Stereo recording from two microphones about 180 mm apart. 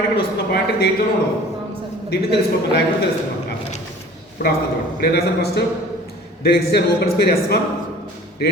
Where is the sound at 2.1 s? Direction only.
65° left (ahead or behind).